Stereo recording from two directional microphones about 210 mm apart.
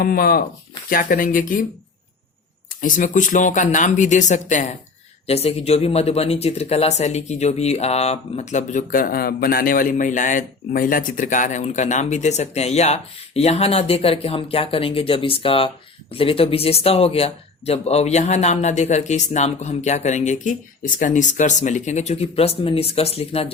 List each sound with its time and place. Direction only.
0.0 s speech: 45° left (ahead or behind)
2.8 s speech: 40° left (ahead or behind)